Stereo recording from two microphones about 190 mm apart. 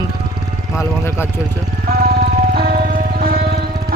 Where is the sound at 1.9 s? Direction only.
55° right (ahead or behind).